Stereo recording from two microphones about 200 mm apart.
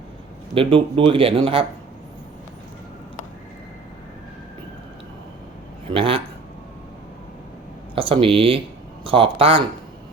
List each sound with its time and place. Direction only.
0.5 s speech: 25° right (ahead or behind)
5.9 s speech: 25° right (ahead or behind)
7.9 s speech: 25° right (ahead or behind)